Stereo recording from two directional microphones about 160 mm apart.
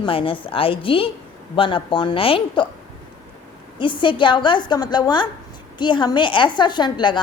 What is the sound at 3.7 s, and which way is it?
A woman's voice, 30° left (ahead or behind).